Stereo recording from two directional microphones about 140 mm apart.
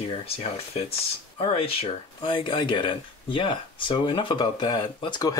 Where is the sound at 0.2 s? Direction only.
45° left (ahead or behind).